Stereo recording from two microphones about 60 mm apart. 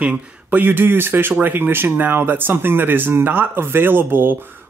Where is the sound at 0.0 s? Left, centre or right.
Right.